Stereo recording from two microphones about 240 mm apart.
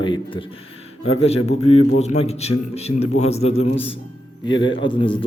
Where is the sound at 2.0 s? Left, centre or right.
Left.